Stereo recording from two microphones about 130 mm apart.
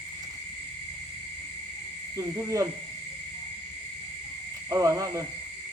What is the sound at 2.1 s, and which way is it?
Speech, 25° right (ahead or behind).